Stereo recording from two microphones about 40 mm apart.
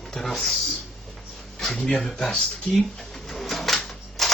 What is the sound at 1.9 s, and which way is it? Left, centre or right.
Speech, centre.